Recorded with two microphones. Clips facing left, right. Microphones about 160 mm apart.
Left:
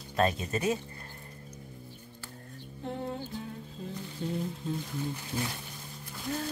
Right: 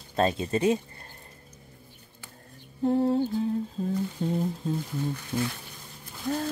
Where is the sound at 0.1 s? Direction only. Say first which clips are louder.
Right 3 dB; 30° right (ahead or behind).